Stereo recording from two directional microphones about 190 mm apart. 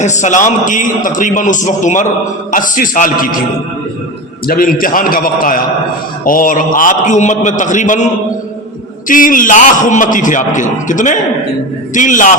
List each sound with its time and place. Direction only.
0.0 s a man's voice: 40° left (ahead or behind)
4.4 s a man's voice: 50° left (ahead or behind)